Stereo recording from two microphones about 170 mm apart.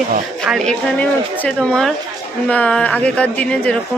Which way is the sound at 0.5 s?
5° left (ahead or behind).